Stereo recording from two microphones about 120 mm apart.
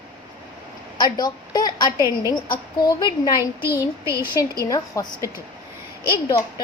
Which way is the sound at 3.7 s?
20° right (ahead or behind).